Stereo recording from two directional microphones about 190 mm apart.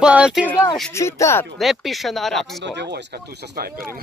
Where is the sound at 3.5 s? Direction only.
50° right (ahead or behind).